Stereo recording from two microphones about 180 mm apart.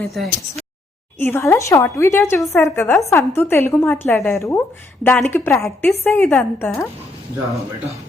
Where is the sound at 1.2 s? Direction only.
10° left (ahead or behind).